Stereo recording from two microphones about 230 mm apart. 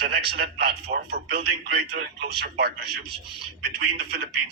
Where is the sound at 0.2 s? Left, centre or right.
Right.